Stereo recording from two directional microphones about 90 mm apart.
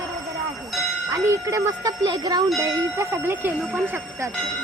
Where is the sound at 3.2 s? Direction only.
20° right (ahead or behind).